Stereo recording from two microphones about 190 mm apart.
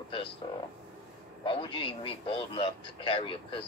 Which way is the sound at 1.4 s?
25° left (ahead or behind).